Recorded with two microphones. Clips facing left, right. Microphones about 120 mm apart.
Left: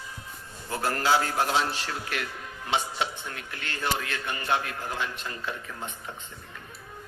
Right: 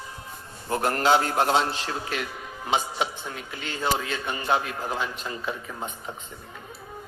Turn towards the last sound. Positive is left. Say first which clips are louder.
# right 3 dB
turn(degrees=-20)  # may be behind; listen again after turning